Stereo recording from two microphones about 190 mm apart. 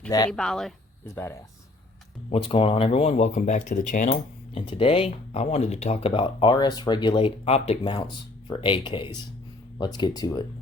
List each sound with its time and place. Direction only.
0.3 s speech: 5° left (ahead or behind)
1.1 s speech: 15° left (ahead or behind)
2.3 s speech: 30° left (ahead or behind)
4.5 s speech: 30° left (ahead or behind)